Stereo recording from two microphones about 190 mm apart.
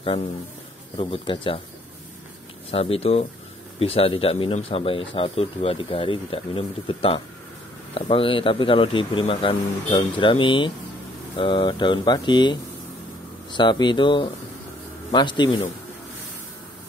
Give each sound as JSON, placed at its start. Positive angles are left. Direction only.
{"t": 0.9, "sound": "speech", "side_deg": 25}
{"t": 2.7, "sound": "speech", "side_deg": 30}